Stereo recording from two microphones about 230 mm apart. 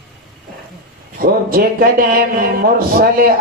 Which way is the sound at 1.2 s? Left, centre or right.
Right.